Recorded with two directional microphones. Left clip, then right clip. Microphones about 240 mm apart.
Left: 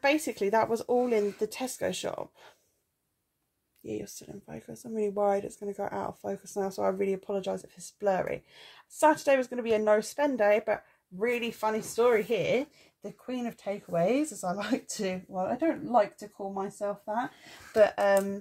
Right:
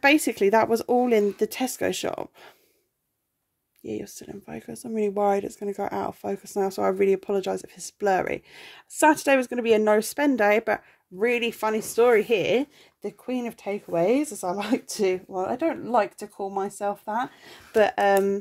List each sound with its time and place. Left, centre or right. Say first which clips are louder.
0.0 s speech: right 7 dB; right
3.8 s speech: right 4 dB; right